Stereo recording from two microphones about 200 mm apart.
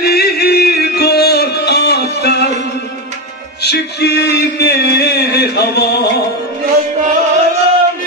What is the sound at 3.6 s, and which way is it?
Music, 55° left (ahead or behind).